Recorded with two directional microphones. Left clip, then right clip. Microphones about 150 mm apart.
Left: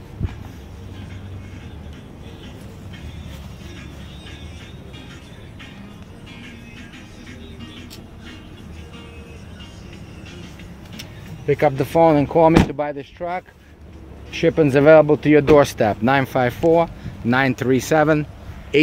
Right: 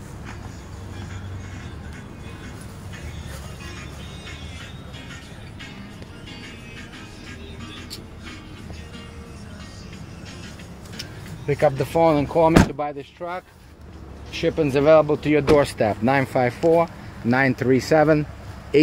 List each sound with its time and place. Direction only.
11.4 s speech: 45° left (ahead or behind); by 13.4 s 60° left (ahead or behind)
14.3 s speech: 75° left (ahead or behind); by 16.5 s 20° left (ahead or behind)
16.6 s speech: 35° left (ahead or behind)
17.3 s speech: 10° left (ahead or behind)